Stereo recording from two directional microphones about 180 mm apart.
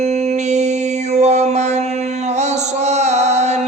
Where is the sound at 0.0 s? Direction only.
35° right (ahead or behind).